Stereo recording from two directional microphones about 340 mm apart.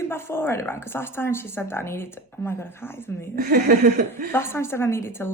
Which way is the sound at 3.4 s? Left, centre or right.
Right.